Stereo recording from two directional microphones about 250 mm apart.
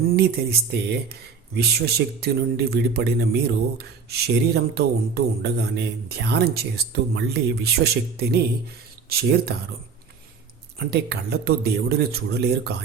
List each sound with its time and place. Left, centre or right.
0.2 s speech: right
10.8 s speech: right